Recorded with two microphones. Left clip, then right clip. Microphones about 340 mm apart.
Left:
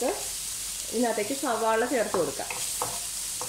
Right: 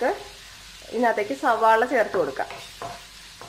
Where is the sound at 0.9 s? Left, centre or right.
Right.